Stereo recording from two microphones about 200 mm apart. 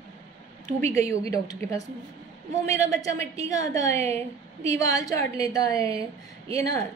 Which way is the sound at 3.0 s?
15° left (ahead or behind).